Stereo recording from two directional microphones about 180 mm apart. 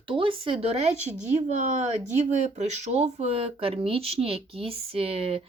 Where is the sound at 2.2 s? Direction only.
40° right (ahead or behind).